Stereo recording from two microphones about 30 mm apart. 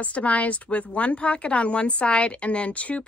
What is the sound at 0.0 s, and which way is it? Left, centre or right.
A woman's voice, left.